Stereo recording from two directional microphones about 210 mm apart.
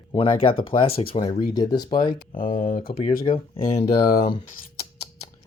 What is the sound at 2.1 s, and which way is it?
Speech, 40° left (ahead or behind).